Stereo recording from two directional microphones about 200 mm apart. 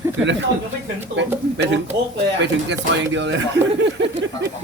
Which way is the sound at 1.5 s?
65° right (ahead or behind).